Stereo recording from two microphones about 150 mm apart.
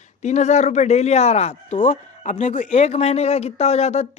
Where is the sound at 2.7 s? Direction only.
45° left (ahead or behind).